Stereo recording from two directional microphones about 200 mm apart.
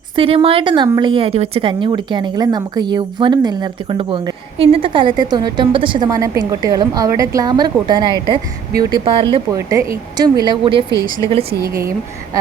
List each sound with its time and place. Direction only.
0.2 s a woman's voice: 30° right (ahead or behind)
9.5 s a woman's voice: 15° right (ahead or behind)
11.6 s a woman's voice: 15° right (ahead or behind)